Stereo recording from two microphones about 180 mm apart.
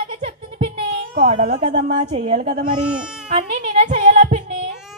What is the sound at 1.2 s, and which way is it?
A child's voice, 40° right (ahead or behind).